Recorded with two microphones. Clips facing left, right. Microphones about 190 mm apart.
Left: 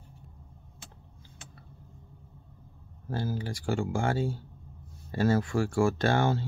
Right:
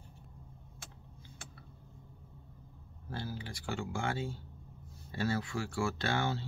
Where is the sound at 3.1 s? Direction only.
45° left (ahead or behind).